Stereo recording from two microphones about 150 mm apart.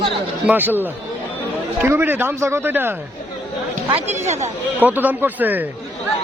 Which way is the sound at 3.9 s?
50° right (ahead or behind).